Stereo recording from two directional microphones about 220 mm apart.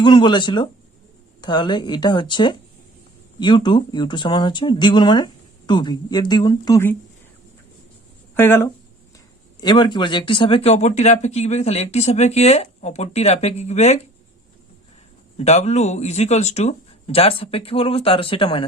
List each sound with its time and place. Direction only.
0.0 s speech: 20° left (ahead or behind)
8.4 s speech: 10° left (ahead or behind); by 14.0 s 30° left (ahead or behind)
15.4 s speech: 30° left (ahead or behind)